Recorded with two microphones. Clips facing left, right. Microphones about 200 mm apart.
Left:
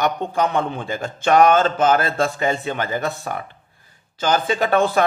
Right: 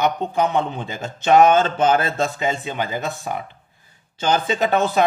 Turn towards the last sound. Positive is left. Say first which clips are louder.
# left 1 dB
turn(degrees=-20)  # may be behind; listen again after turning